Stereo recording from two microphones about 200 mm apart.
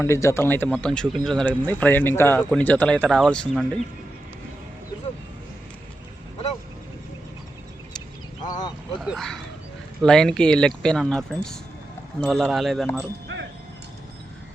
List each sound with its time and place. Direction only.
0.0 s speech: 15° left (ahead or behind)
8.4 s a sound: 20° left (ahead or behind)
9.0 s speech: centre (ahead or behind)